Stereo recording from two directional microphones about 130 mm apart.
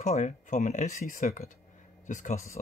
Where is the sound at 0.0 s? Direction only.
65° left (ahead or behind); by 1.5 s 85° left.